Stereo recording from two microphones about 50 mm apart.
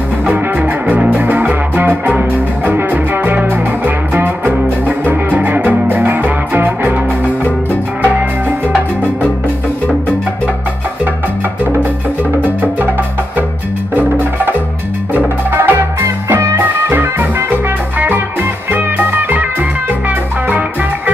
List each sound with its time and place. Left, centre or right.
0.3 s music: right
13.9 s music: right
17.9 s music: right